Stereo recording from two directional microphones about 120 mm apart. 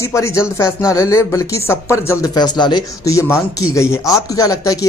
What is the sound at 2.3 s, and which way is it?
Speech, 35° left (ahead or behind).